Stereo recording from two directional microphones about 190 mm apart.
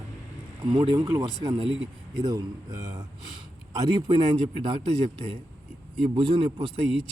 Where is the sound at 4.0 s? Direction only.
25° right (ahead or behind).